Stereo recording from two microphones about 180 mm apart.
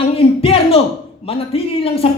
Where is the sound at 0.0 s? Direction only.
30° left (ahead or behind).